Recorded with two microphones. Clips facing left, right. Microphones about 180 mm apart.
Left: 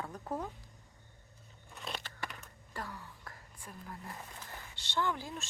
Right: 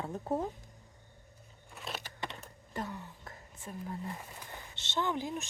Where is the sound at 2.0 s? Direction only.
20° right (ahead or behind).